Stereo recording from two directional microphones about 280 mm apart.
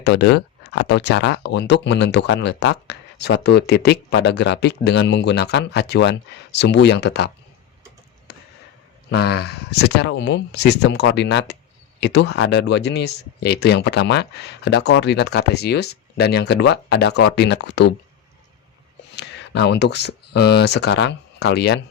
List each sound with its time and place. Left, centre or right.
0.0 s speech: left
9.0 s speech: left
19.1 s speech: left